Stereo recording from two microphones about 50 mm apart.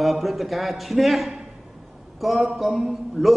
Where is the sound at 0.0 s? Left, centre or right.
Centre.